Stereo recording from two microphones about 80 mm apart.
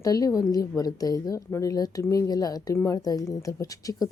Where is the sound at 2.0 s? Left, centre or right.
Left.